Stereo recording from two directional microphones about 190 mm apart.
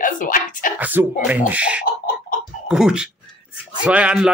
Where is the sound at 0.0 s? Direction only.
45° left (ahead or behind).